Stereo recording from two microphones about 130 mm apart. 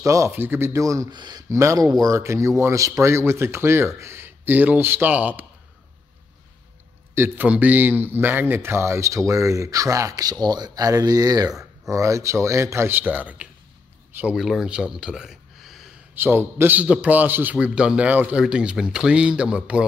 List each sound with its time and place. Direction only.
0.0 s speech: 25° right (ahead or behind)
1.1 s speech: 35° right (ahead or behind)
1.5 s speech: 25° right (ahead or behind)
7.2 s speech: 15° right (ahead or behind)
16.2 s a man's voice: 20° right (ahead or behind)